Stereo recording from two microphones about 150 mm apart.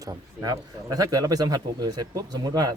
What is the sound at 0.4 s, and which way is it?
Speech, 25° right (ahead or behind).